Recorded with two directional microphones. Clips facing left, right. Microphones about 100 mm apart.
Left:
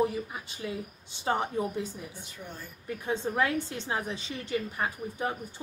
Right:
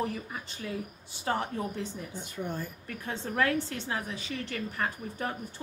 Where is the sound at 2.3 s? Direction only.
50° right (ahead or behind).